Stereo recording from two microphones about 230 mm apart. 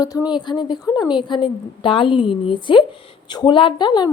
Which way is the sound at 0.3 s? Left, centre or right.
Centre.